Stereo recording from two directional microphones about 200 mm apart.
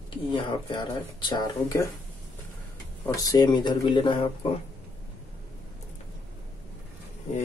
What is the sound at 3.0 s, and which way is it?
Speech, 15° left (ahead or behind).